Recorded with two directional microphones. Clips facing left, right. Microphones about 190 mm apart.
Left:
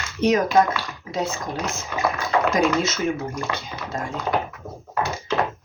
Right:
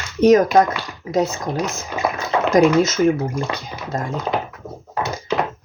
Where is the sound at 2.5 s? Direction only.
40° right (ahead or behind).